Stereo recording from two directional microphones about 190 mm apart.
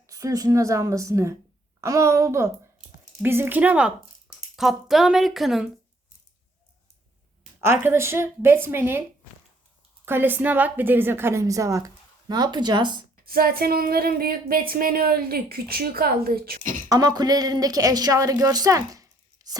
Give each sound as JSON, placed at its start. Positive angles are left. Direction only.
{"t": 0.1, "sound": "a woman's voice", "side_deg": -15}
{"t": 7.6, "sound": "a woman's voice", "side_deg": -10}
{"t": 10.1, "sound": "a woman's voice", "side_deg": -10}
{"t": 13.2, "sound": "speech", "side_deg": -50}
{"t": 16.9, "sound": "speech", "side_deg": -20}